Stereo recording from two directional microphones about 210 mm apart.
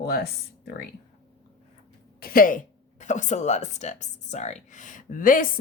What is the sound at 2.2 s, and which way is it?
Speech, 40° left (ahead or behind).